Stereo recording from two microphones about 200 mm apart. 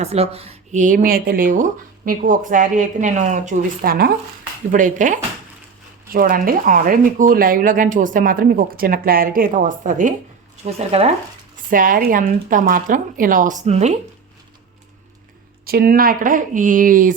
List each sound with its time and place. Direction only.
0.0 s a woman's voice: 30° right (ahead or behind)
11.7 s a woman's voice: 45° right (ahead or behind)
15.6 s speech: 50° right (ahead or behind)